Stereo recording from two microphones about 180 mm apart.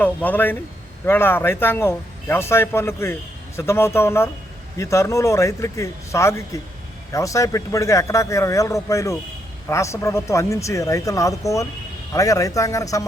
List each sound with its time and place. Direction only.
0.0 s a man's voice: 10° left (ahead or behind)